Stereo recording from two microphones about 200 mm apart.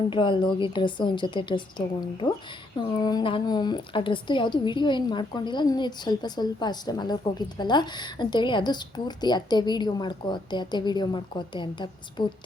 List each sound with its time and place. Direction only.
0.1 s a woman's voice: 25° left (ahead or behind)
2.7 s a woman's voice: 20° left (ahead or behind)